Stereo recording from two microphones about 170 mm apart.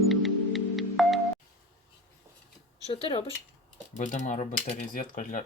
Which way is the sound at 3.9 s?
45° left (ahead or behind).